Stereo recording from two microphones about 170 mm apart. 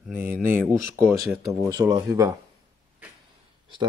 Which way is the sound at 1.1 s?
15° right (ahead or behind).